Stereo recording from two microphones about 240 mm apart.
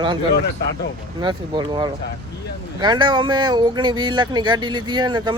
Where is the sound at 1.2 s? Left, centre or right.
Centre.